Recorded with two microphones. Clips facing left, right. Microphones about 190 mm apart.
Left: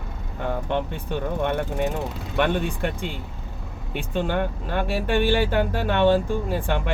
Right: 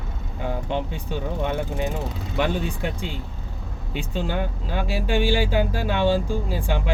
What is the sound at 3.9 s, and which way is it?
Speech, 60° left (ahead or behind).